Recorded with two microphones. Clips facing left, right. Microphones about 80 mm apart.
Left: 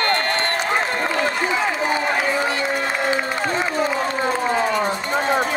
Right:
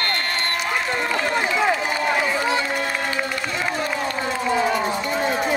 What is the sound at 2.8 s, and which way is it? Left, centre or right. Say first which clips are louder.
Crowd: left 3 dB; left.